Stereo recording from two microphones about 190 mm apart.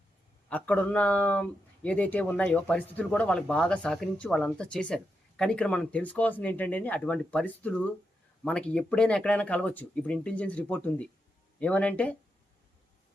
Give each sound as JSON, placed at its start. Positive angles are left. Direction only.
{"t": 0.5, "sound": "speech", "side_deg": 10}